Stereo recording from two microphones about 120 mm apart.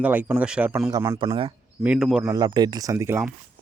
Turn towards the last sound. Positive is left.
turn(degrees=-25)  # may be behind; listen again after turning